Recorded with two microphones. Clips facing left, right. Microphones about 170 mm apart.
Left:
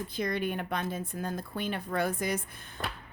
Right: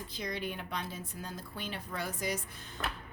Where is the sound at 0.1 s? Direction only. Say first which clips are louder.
Left 6 dB; 55° left (ahead or behind).